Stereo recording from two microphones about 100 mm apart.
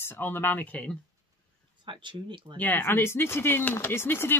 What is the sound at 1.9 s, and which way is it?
Speech, 55° right (ahead or behind).